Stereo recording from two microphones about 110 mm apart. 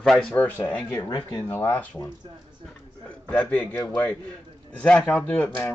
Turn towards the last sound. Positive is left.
turn(degrees=15)  # may be behind; listen again after turning